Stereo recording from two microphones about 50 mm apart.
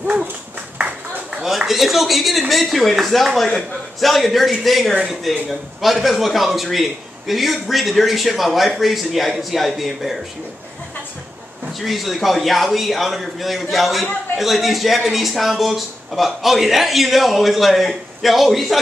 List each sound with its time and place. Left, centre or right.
0.0 s a sound: right
1.7 s a man's voice: centre
11.8 s a man's voice: centre